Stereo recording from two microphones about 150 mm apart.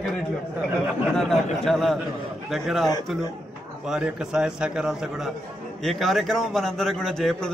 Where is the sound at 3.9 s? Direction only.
5° right (ahead or behind).